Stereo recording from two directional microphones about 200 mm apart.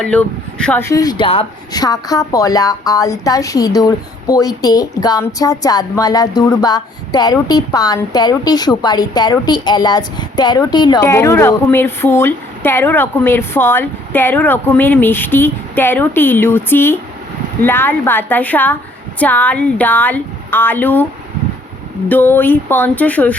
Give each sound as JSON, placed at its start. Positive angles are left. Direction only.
{"t": 0.0, "sound": "speech", "side_deg": 5}
{"t": 22.1, "sound": "speech", "side_deg": 10}